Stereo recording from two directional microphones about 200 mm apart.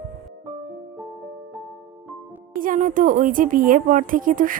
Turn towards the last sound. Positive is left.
turn(degrees=-45)  # may be behind; listen again after turning